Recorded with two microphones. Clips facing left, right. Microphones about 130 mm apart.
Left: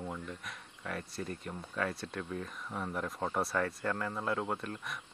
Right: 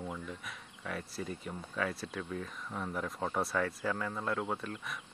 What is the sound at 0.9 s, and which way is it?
Speech, centre (ahead or behind).